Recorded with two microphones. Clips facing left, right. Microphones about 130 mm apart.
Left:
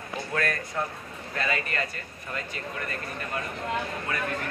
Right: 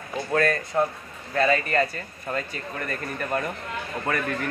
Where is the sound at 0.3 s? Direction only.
35° right (ahead or behind).